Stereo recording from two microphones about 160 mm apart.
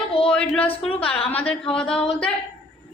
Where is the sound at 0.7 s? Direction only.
35° left (ahead or behind).